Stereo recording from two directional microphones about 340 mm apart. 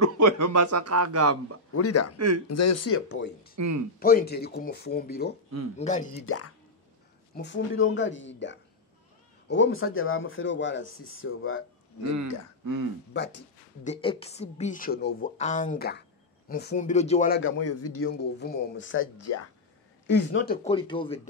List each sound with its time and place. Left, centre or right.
0.0 s a man's voice: right
1.7 s speech: left
2.1 s a man's voice: right
2.4 s speech: left
3.5 s speech: right
4.0 s speech: left
6.2 s speech: left
12.6 s speech: right
13.1 s speech: left
13.8 s speech: centre
17.4 s speech: left
18.1 s speech: left
20.1 s speech: left; by 21.2 s centre